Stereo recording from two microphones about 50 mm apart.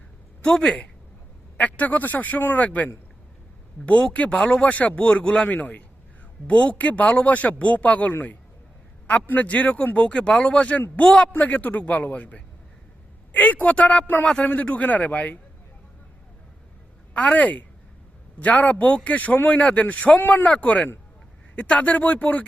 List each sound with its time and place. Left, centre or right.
0.6 s speech: centre
1.5 s speech: left
4.1 s speech: left
5.5 s speech: left
17.2 s speech: left